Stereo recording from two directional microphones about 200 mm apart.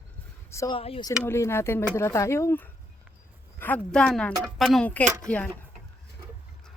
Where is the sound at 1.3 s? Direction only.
15° left (ahead or behind).